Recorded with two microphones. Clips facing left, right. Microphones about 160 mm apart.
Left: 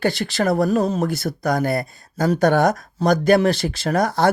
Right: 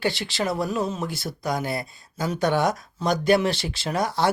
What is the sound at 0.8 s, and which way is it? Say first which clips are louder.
Speech: left 7 dB; 40° left (ahead or behind).